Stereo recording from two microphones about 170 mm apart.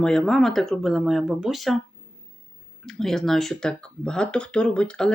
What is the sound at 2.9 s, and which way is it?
Speech, centre (ahead or behind).